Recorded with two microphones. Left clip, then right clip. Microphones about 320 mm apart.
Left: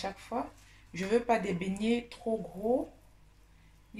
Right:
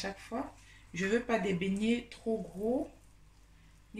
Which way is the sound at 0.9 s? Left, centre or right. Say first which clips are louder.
Left 3 dB; centre.